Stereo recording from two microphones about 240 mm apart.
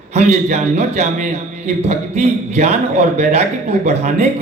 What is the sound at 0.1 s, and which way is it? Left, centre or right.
A man's voice, right.